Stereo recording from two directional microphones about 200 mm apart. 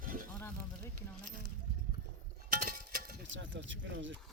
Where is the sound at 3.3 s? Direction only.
65° right (ahead or behind).